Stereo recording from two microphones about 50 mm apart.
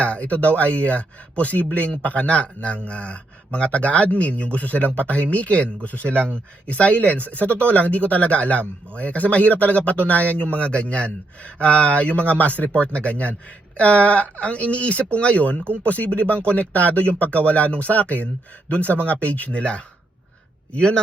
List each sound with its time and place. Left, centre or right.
0.0 s a man's voice: left
15.6 s speech: right
15.9 s a man's voice: left